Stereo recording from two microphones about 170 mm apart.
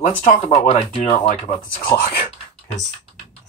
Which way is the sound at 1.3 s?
50° left (ahead or behind).